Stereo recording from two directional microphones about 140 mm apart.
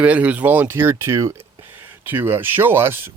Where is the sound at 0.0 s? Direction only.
10° right (ahead or behind).